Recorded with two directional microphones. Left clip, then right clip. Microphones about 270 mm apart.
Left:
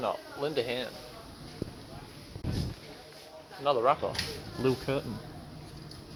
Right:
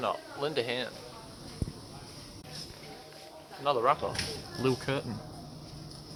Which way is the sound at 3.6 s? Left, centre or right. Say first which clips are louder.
Left 1 dB; centre.